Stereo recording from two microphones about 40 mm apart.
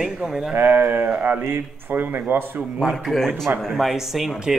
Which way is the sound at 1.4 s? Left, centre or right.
Right.